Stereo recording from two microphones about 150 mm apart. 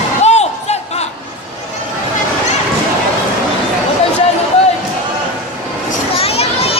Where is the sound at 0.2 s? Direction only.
45° left (ahead or behind).